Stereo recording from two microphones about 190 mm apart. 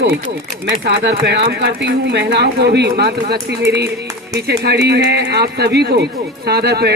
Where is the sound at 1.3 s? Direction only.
60° right (ahead or behind).